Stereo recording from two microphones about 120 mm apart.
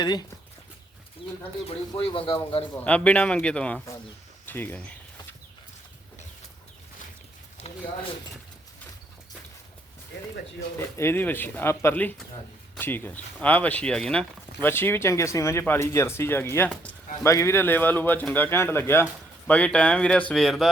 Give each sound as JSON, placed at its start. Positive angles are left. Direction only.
{"t": 0.0, "sound": "speech", "side_deg": 35}
{"t": 1.2, "sound": "bird", "side_deg": -5}
{"t": 2.0, "sound": "speech", "side_deg": 50}
{"t": 2.7, "sound": "a man's voice", "side_deg": 10}
{"t": 7.6, "sound": "speech", "side_deg": 55}
{"t": 10.8, "sound": "a man's voice", "side_deg": 20}
{"t": 14.6, "sound": "a man's voice", "side_deg": 20}